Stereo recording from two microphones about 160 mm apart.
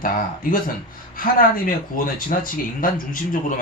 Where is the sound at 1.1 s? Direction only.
60° left (ahead or behind).